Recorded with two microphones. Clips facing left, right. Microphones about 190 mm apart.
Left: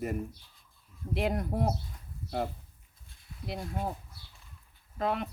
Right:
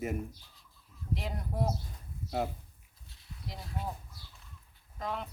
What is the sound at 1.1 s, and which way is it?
Speech, 70° left (ahead or behind).